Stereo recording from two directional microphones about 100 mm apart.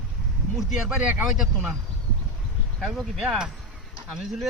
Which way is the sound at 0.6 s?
5° right (ahead or behind).